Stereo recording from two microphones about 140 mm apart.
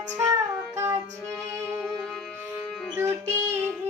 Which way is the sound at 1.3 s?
10° left (ahead or behind).